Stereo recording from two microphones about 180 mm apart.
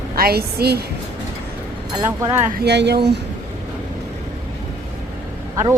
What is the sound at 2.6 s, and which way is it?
Speech, 70° right (ahead or behind).